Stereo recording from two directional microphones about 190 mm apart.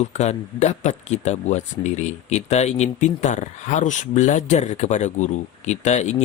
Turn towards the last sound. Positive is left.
turn(degrees=35)  # may be behind; listen again after turning